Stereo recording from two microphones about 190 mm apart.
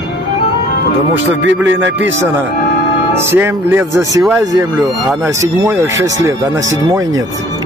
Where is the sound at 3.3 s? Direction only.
15° right (ahead or behind).